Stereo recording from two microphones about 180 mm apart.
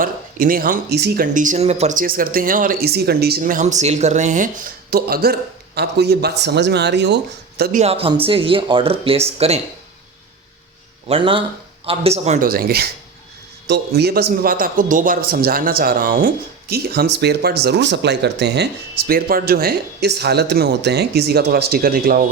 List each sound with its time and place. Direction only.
0.0 s speech: 50° right (ahead or behind)
7.8 s speech: 35° right (ahead or behind)
11.1 s speech: 30° right (ahead or behind)
12.5 s a man's voice: 55° right (ahead or behind)